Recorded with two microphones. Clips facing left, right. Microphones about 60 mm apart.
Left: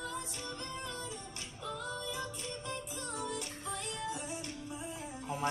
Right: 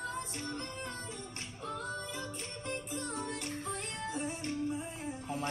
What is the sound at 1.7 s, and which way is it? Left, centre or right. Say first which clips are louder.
Music: even; right.